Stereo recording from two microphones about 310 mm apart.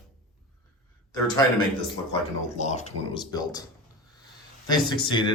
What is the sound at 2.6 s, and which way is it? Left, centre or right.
Speech, left.